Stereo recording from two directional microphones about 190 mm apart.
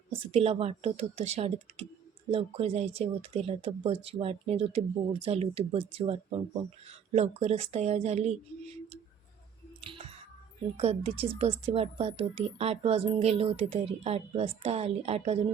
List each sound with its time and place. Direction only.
0.1 s a woman's voice: 30° right (ahead or behind)
10.8 s a woman's voice: 30° right (ahead or behind)